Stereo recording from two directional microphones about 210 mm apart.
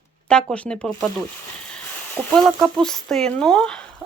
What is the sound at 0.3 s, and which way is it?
Speech, 5° left (ahead or behind).